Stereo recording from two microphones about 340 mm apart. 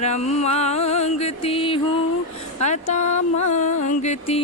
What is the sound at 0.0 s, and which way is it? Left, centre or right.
Music, centre.